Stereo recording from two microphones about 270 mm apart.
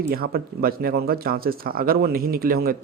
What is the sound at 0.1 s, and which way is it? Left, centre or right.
Speech, right.